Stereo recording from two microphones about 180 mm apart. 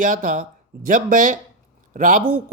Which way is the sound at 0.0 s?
45° right (ahead or behind).